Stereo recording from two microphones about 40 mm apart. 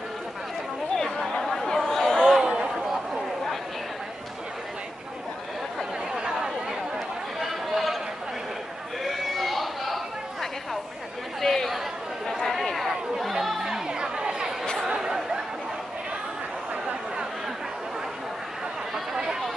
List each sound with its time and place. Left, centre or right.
0.9 s chatter: centre
2.4 s a sound: centre
6.1 s chatter: centre
7.3 s chatter: centre
9.0 s a sound: centre
11.3 s chatter: centre
13.7 s chatter: centre
18.9 s run: centre